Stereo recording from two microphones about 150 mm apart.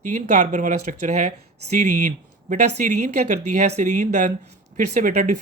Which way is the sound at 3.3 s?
55° right (ahead or behind).